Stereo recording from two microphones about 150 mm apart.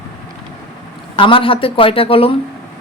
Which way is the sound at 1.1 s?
35° left (ahead or behind).